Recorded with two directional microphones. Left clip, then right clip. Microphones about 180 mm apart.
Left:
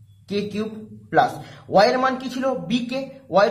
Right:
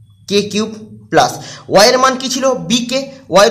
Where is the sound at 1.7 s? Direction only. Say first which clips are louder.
Right 8 dB; 35° right (ahead or behind).